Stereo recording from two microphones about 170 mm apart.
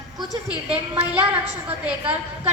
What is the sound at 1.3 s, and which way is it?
Speech, 10° right (ahead or behind).